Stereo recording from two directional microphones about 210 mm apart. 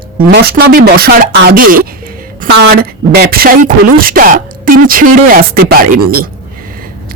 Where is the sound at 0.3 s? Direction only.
50° right (ahead or behind).